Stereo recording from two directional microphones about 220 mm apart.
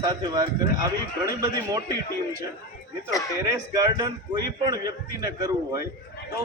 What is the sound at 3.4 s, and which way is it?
A man's voice, 15° right (ahead or behind).